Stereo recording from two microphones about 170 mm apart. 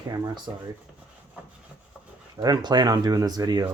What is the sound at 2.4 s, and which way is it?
Speech, 25° right (ahead or behind).